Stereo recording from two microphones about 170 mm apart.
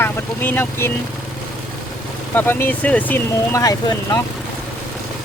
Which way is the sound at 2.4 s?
10° left (ahead or behind).